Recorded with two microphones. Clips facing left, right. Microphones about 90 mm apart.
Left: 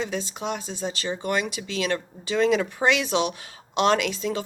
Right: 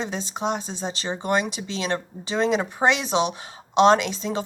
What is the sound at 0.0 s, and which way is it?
Speech, 25° right (ahead or behind).